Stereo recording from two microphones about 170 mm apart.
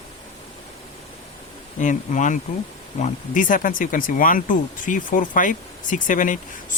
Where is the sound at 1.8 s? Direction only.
45° left (ahead or behind).